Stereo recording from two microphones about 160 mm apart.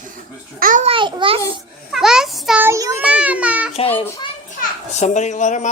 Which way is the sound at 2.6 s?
15° right (ahead or behind).